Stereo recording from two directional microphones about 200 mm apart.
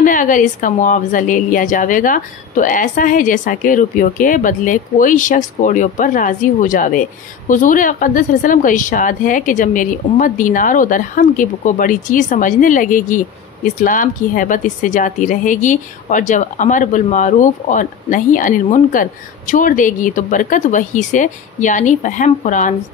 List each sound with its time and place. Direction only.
0.0 s a woman's voice: 40° left (ahead or behind)